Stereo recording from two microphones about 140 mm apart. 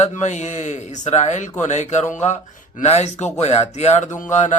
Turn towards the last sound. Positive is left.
turn(degrees=60)  # may be behind; listen again after turning